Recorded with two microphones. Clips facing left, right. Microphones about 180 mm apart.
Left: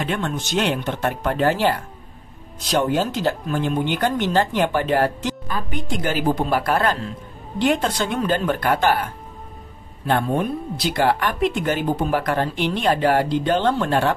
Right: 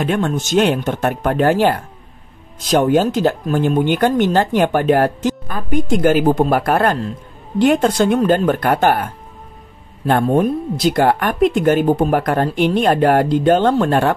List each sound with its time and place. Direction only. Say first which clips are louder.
0.0 s speech: right 6 dB; 45° right (ahead or behind)